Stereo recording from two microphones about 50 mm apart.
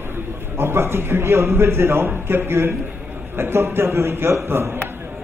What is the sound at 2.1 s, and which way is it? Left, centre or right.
A man's voice, right.